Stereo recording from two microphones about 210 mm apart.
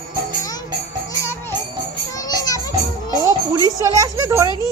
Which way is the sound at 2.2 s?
15° left (ahead or behind).